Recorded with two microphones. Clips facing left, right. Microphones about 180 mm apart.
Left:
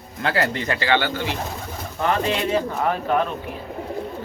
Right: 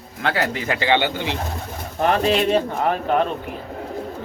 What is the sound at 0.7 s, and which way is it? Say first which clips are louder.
Speech: right 3 dB; 20° right (ahead or behind).